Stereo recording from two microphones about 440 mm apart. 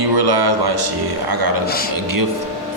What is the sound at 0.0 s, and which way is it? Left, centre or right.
Speech, right.